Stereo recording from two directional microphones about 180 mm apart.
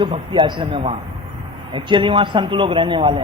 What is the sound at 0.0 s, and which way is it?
A woman's voice, 25° right (ahead or behind).